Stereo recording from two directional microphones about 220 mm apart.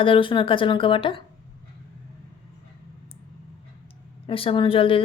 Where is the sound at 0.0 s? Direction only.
25° left (ahead or behind).